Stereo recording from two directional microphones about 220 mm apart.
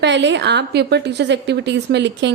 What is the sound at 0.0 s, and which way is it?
A woman's voice, 55° right (ahead or behind).